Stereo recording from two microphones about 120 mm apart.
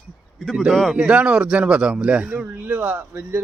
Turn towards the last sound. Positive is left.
turn(degrees=-20)  # may be behind; listen again after turning